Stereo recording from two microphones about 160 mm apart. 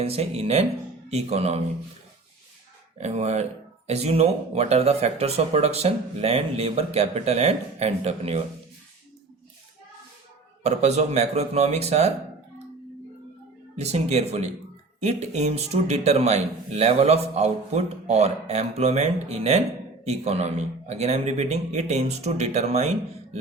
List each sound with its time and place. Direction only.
0.0 s speech: 40° right (ahead or behind)
3.0 s a man's voice: 45° right (ahead or behind)
10.6 s a man's voice: 45° right (ahead or behind)
13.7 s a man's voice: 40° right (ahead or behind)